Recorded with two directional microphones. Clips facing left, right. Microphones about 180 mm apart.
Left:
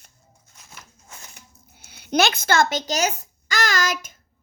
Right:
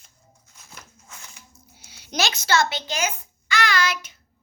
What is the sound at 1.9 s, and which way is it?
A child's voice, 55° left (ahead or behind).